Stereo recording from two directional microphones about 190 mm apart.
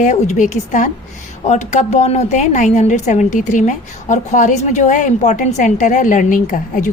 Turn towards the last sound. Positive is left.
turn(degrees=40)  # may be behind; listen again after turning